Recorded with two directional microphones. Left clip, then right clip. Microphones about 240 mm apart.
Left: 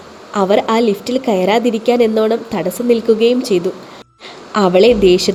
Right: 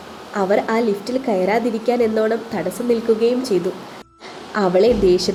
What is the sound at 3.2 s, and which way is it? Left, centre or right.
Speech, left.